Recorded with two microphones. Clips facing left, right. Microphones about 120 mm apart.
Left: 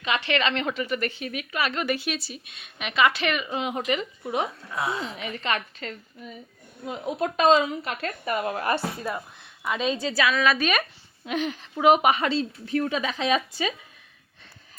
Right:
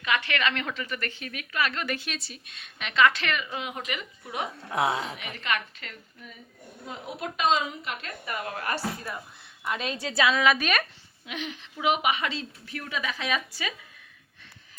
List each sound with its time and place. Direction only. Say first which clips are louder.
0.0 s a woman's voice: left 2 dB; 25° left (ahead or behind)
4.7 s a woman's voice: right 7 dB; 75° right (ahead or behind)
5.1 s a woman's voice: left 3 dB; 30° left (ahead or behind)
8.2 s a woman's voice: left 7 dB; 30° left (ahead or behind)
10.0 s a woman's voice: right 3 dB; 20° right (ahead or behind)
11.3 s a woman's voice: left 8 dB; 40° left (ahead or behind); by 13.7 s 25° left (ahead or behind)